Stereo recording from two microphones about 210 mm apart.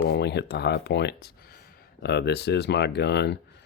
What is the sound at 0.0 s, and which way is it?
Speech, 55° left (ahead or behind).